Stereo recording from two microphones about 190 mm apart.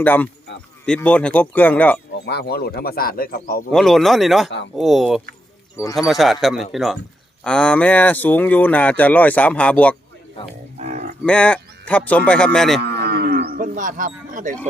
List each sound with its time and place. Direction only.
0.0 s speech: 10° left (ahead or behind)
2.1 s speech: 60° left (ahead or behind)
3.7 s speech: centre (ahead or behind)
10.8 s livestock: 40° right (ahead or behind)
11.3 s speech: 5° left (ahead or behind)
12.8 s cattle: 60° right (ahead or behind); by 14.5 s 45° right (ahead or behind)